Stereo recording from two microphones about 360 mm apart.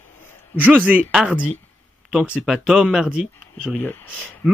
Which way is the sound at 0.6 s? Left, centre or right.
Centre.